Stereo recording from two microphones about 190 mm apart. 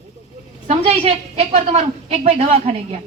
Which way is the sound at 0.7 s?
35° right (ahead or behind).